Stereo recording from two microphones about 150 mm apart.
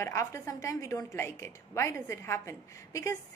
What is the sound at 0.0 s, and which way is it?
A woman's voice, 20° left (ahead or behind).